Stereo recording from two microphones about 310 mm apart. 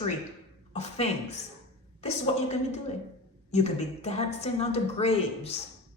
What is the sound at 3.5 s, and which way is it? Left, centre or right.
A woman's voice, left.